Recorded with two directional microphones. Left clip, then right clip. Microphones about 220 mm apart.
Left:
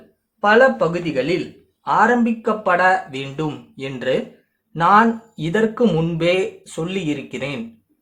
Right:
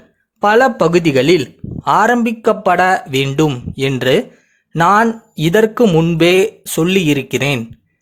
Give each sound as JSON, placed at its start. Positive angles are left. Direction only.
{"t": 0.4, "sound": "speech", "side_deg": -50}